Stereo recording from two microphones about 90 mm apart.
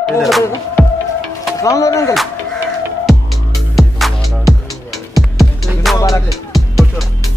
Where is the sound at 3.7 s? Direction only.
Centre (ahead or behind).